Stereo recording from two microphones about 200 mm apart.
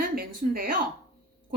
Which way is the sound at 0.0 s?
45° right (ahead or behind).